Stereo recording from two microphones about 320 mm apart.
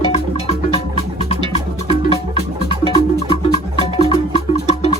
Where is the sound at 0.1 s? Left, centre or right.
Centre.